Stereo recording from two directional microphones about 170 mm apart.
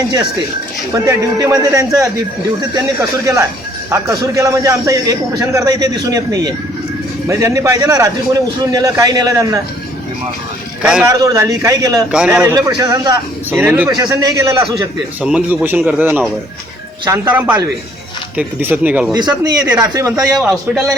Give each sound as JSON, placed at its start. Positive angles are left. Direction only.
{"t": 0.9, "sound": "a man's voice", "side_deg": -20}
{"t": 11.0, "sound": "a man's voice", "side_deg": -20}
{"t": 12.1, "sound": "a man's voice", "side_deg": -5}
{"t": 15.2, "sound": "a man's voice", "side_deg": -5}
{"t": 19.1, "sound": "a man's voice", "side_deg": -20}
{"t": 20.2, "sound": "a man's voice", "side_deg": -5}